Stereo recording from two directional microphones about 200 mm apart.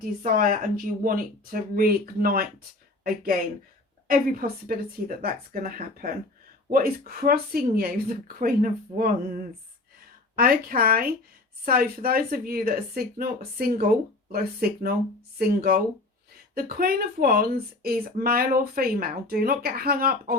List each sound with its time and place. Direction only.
0.2 s speech: 45° right (ahead or behind)